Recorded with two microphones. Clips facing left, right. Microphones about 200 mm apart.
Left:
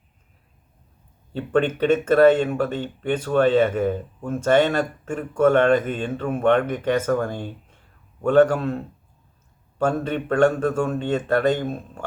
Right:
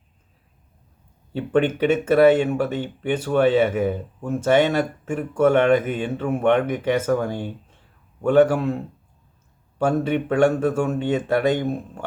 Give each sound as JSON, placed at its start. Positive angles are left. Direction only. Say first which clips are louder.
{"t": 1.3, "sound": "speech", "louder": "right 1 dB", "side_deg": -10}